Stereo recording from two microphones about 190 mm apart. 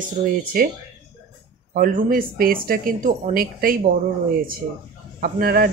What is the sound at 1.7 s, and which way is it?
Speech, 50° right (ahead or behind).